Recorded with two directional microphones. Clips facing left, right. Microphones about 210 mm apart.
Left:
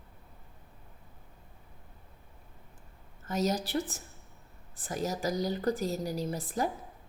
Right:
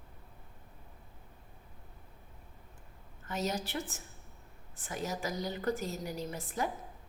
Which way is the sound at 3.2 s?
40° left (ahead or behind).